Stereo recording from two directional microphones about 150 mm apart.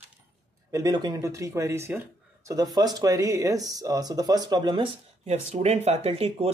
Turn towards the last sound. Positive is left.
turn(degrees=-40)  # may be behind; listen again after turning